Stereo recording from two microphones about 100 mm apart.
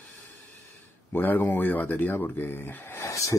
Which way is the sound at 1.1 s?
20° left (ahead or behind).